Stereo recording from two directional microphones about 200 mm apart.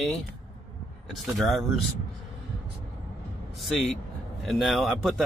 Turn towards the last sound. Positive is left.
turn(degrees=0)  # may be behind; listen again after turning